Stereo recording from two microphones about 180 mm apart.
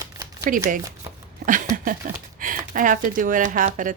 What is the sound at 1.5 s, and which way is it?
A woman's voice, 50° right (ahead or behind).